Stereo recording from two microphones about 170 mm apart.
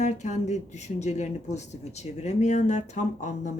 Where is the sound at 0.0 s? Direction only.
45° left (ahead or behind).